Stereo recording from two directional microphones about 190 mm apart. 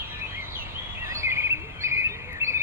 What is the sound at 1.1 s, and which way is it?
Chirp, 15° right (ahead or behind).